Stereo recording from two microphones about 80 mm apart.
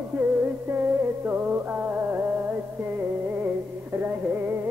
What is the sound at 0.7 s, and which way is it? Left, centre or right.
Music, right.